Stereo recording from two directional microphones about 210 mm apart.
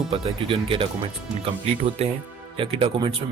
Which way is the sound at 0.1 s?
25° right (ahead or behind).